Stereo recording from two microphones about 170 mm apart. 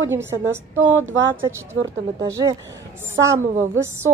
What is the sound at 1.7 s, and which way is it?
A woman's voice, 20° right (ahead or behind).